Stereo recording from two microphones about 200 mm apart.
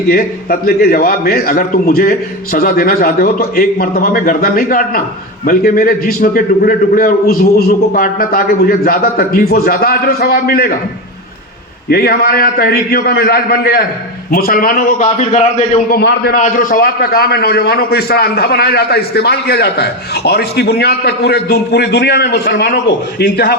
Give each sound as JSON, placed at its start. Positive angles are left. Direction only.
{"t": 0.1, "sound": "a man's voice", "side_deg": 50}
{"t": 11.9, "sound": "a man's voice", "side_deg": 50}
{"t": 16.0, "sound": "a man's voice", "side_deg": 55}